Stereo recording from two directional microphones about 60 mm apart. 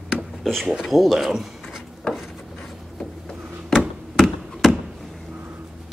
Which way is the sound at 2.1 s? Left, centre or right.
Centre.